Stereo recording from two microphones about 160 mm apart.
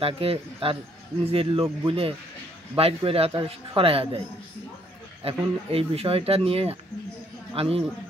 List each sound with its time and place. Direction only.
0.0 s speech: 35° right (ahead or behind)
5.2 s speech: 35° right (ahead or behind)